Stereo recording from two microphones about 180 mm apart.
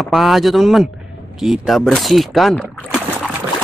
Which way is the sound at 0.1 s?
Centre (ahead or behind).